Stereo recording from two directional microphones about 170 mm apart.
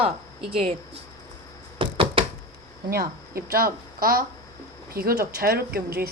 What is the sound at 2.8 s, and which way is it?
Speech, 60° right (ahead or behind).